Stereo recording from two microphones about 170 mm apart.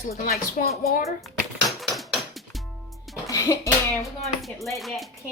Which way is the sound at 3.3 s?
20° left (ahead or behind).